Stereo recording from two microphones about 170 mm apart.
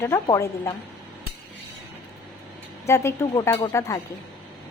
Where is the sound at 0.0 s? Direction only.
15° left (ahead or behind).